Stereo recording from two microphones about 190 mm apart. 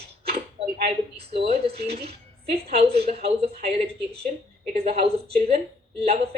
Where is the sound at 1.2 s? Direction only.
30° right (ahead or behind).